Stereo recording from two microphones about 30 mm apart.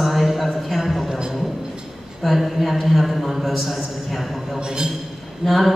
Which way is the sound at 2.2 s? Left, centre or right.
Centre.